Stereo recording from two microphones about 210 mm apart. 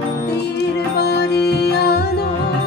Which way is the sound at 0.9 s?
50° left (ahead or behind).